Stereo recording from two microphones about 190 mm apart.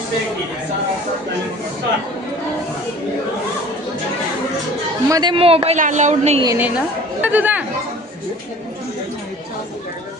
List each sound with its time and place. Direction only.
5.0 s a woman's voice: 20° right (ahead or behind); by 6.4 s 35° right (ahead or behind)
6.4 s a woman's voice: 15° right (ahead or behind)